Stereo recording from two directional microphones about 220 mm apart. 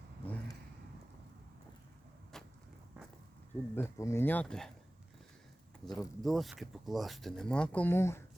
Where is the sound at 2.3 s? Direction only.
Centre (ahead or behind).